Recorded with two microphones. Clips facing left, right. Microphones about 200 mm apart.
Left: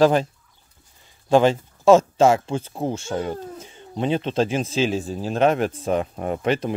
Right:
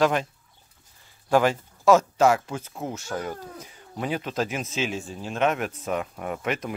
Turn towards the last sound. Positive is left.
turn(degrees=30)  # may be behind; listen again after turning